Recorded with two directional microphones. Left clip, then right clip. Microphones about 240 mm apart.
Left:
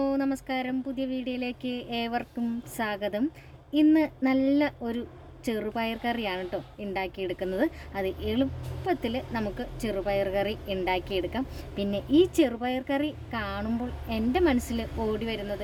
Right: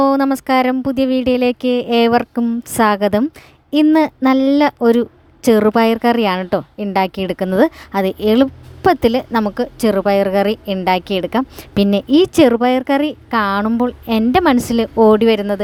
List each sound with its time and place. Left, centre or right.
0.0 s a woman's voice: right